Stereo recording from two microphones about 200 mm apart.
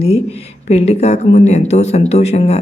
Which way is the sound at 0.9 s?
35° left (ahead or behind).